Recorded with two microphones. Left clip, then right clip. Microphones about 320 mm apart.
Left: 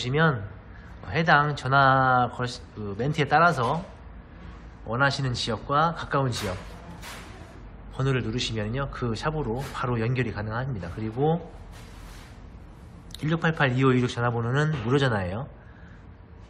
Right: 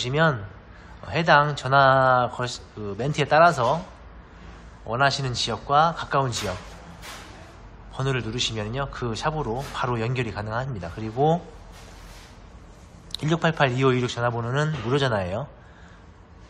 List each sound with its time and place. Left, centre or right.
0.0 s speech: centre
4.8 s speech: centre
7.9 s speech: centre
13.1 s speech: centre